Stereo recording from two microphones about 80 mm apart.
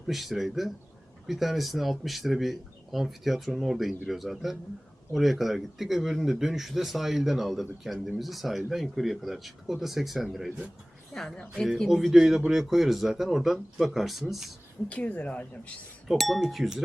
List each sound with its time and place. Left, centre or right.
0.1 s speech: centre
14.8 s speech: centre
16.0 s speech: centre